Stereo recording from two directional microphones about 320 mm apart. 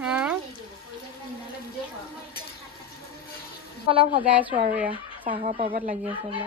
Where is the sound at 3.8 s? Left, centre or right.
Centre.